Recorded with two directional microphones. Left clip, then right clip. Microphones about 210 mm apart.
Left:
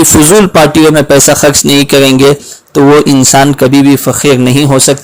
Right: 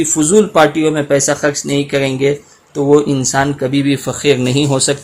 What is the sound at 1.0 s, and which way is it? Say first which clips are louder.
Speech: left 8 dB; 30° left (ahead or behind).